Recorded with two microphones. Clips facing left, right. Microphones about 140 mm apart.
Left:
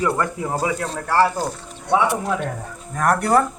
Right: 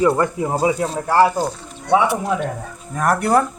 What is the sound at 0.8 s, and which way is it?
Speech, 10° right (ahead or behind).